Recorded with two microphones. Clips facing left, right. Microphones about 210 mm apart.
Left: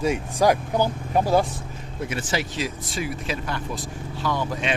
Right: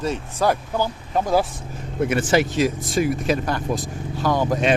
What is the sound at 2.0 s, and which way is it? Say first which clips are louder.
Speech: right 9 dB; 55° right (ahead or behind).